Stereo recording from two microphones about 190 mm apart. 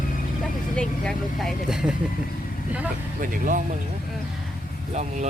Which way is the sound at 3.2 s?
45° right (ahead or behind).